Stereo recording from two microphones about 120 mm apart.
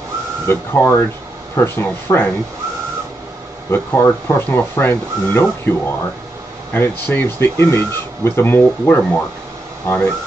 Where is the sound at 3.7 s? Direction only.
20° left (ahead or behind).